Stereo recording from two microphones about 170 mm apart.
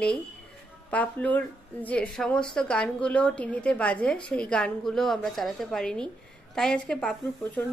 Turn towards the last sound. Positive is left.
turn(degrees=5)  # may be behind; listen again after turning